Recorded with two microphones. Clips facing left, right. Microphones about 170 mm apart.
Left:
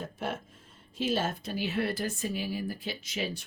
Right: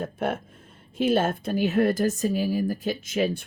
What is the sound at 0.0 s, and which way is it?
Speech, 55° right (ahead or behind).